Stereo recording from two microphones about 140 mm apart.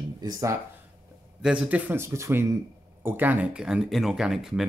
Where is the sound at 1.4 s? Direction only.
5° right (ahead or behind).